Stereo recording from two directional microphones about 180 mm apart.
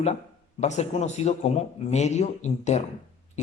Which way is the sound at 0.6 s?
40° left (ahead or behind).